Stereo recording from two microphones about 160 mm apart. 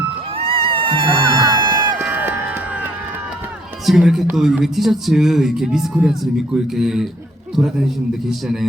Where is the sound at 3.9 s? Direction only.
Centre (ahead or behind).